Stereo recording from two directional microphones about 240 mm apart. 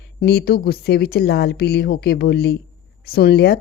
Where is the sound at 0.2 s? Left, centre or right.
Left.